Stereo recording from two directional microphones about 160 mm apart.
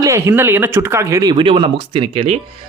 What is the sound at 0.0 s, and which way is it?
A man's voice, 15° right (ahead or behind).